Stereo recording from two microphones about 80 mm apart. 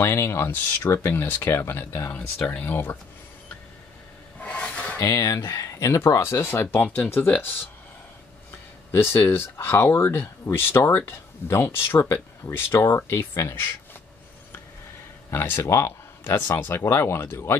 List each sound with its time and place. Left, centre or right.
0.0 s speech: left
2.3 s speech: centre
2.6 s speech: left
4.4 s filing: centre
4.9 s speech: left
8.9 s speech: left
15.3 s speech: left